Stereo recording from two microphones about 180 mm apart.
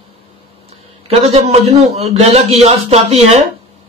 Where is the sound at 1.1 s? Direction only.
35° right (ahead or behind).